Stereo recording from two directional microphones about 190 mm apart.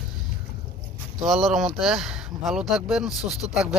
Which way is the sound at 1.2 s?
Centre (ahead or behind).